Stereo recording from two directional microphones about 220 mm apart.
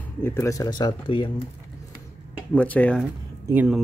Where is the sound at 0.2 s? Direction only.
10° left (ahead or behind).